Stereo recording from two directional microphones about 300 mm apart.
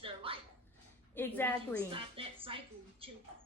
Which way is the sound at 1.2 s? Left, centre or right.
Centre.